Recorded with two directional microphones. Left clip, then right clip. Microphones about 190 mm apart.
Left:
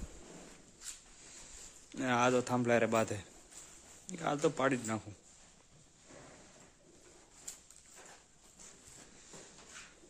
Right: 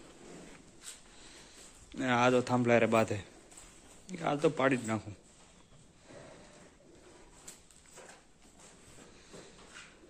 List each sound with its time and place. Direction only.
1.9 s a man's voice: 10° left (ahead or behind)